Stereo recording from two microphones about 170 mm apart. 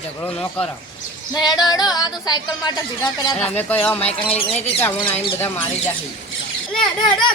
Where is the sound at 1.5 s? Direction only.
25° left (ahead or behind).